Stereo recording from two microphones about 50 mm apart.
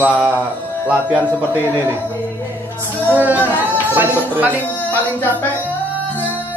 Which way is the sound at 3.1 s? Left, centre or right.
Right.